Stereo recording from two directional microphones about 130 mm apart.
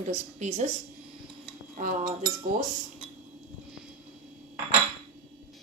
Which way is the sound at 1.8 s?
90° right.